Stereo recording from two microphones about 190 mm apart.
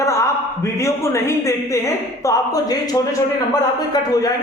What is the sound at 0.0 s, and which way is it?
A man's voice, 15° left (ahead or behind).